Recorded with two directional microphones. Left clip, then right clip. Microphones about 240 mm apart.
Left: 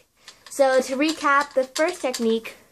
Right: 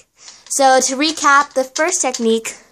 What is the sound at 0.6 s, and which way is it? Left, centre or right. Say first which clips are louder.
Speech: right 6 dB; right.